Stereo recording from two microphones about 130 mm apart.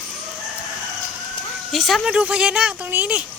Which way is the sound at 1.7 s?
Centre (ahead or behind).